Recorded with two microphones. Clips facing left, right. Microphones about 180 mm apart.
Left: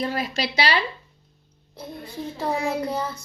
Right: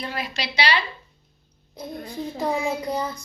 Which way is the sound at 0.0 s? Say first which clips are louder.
Left 4 dB; 40° left (ahead or behind).